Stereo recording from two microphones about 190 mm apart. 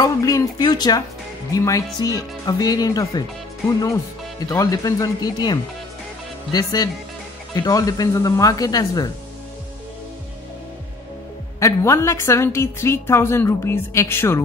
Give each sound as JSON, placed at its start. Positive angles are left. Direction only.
{"t": 0.0, "sound": "a woman's voice", "side_deg": 20}
{"t": 11.6, "sound": "a woman's voice", "side_deg": 15}